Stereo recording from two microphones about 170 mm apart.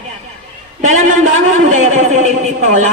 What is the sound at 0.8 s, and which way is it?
A man's voice, 45° right (ahead or behind).